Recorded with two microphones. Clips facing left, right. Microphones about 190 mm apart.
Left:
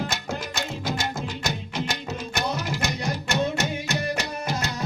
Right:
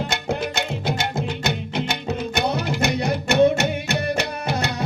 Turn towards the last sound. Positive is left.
turn(degrees=-65)  # may be behind; listen again after turning